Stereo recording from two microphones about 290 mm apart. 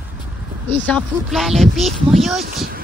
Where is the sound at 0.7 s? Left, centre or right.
Centre.